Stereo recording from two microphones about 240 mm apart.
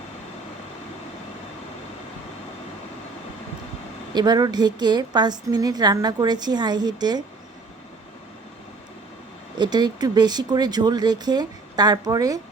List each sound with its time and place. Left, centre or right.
4.1 s a woman's voice: centre
9.6 s a woman's voice: centre